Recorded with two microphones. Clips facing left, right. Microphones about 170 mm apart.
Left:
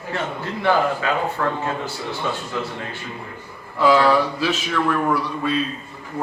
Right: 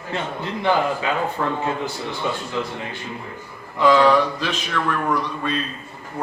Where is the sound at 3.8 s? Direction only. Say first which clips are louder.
Right 1 dB; 5° left (ahead or behind).